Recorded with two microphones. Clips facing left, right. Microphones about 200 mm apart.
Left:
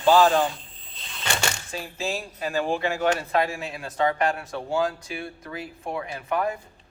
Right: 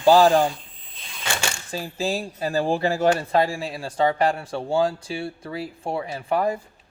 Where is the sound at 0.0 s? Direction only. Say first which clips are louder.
Right 3 dB; 35° right (ahead or behind).